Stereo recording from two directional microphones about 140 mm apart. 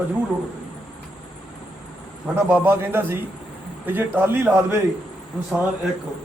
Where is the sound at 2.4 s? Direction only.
15° right (ahead or behind).